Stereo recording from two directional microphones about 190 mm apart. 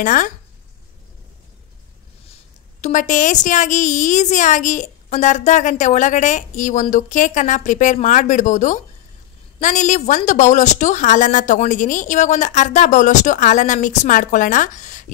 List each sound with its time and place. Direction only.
0.0 s a woman's voice: 45° left (ahead or behind)
2.8 s a woman's voice: 40° left (ahead or behind)